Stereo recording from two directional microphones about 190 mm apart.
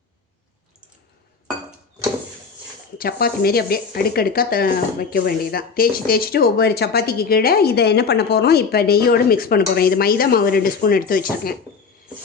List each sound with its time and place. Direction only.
3.0 s speech: 50° left (ahead or behind)